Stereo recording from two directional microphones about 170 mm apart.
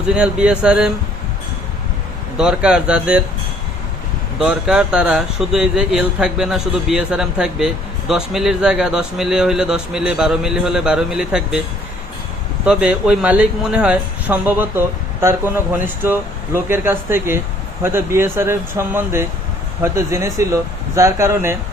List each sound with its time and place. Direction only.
0.1 s speech: 5° right (ahead or behind)
2.4 s speech: 5° right (ahead or behind)
4.4 s speech: 5° right (ahead or behind)
12.6 s speech: 5° right (ahead or behind)